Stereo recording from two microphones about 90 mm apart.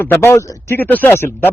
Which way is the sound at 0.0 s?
25° left (ahead or behind).